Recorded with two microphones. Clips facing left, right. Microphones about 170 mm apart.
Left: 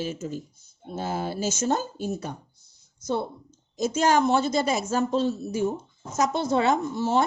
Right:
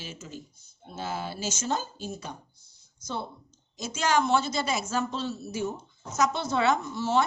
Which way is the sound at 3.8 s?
45° left (ahead or behind).